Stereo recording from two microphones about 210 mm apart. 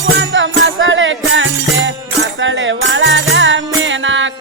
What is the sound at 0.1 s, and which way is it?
Music, 60° right (ahead or behind).